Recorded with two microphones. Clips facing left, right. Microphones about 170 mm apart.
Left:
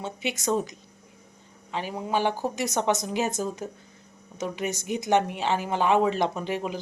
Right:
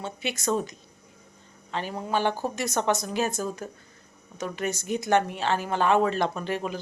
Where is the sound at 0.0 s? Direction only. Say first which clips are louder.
Even; 15° left (ahead or behind).